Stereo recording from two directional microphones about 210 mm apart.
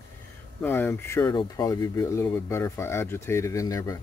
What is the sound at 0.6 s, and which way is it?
Speech, 10° left (ahead or behind).